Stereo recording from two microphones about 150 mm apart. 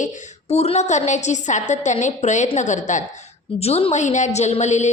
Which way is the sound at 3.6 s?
45° left (ahead or behind).